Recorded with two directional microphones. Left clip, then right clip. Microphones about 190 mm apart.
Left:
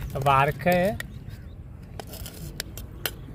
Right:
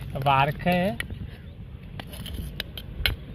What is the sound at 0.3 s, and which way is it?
Speech, 5° left (ahead or behind).